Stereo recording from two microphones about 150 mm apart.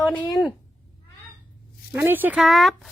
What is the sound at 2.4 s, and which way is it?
Speech, centre (ahead or behind).